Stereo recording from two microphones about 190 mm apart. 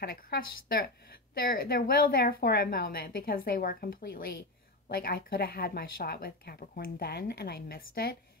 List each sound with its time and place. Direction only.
0.0 s speech: 55° left (ahead or behind)